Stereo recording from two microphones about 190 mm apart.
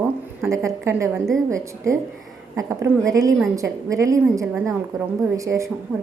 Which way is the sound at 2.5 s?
15° right (ahead or behind).